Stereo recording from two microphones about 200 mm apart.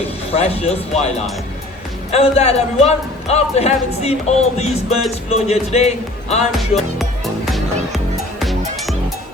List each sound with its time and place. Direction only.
0.3 s a man's voice: 30° left (ahead or behind)
6.6 s music: centre (ahead or behind)